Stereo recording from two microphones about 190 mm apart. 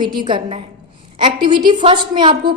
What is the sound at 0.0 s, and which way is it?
A woman's voice, 25° right (ahead or behind).